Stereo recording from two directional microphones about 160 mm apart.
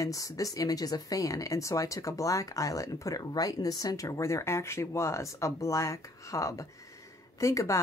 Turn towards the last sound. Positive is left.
turn(degrees=20)  # may be behind; listen again after turning